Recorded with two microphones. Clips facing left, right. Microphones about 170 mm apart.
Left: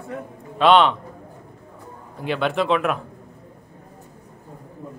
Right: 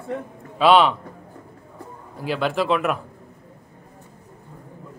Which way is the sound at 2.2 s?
Centre (ahead or behind).